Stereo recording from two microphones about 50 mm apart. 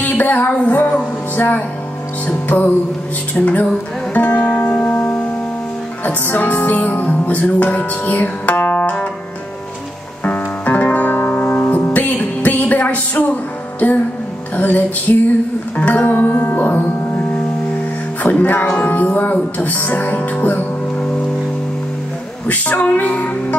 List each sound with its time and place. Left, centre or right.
0.0 s music: left
10.2 s music: left
18.4 s music: left
22.5 s music: left